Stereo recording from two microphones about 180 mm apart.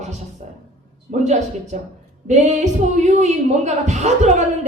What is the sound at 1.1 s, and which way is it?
A woman's voice, 40° right (ahead or behind).